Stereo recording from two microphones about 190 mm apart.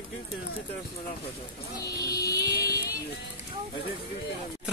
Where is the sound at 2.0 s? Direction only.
20° left (ahead or behind).